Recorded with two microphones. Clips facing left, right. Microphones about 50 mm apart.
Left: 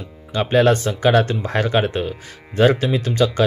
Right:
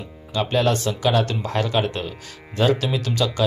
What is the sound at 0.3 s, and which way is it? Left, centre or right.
Speech, left.